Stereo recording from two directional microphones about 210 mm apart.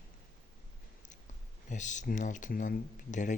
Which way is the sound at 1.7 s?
35° left (ahead or behind).